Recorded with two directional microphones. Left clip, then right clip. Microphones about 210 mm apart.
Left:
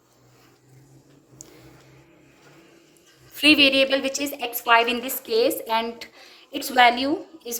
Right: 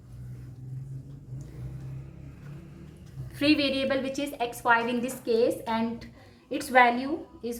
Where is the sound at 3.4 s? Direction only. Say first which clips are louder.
Left 8 dB; 45° left (ahead or behind).